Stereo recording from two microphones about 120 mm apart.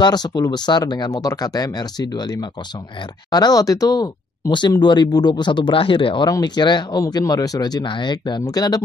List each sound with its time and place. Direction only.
0.0 s speech: 35° left (ahead or behind)
6.2 s speech: 35° left (ahead or behind)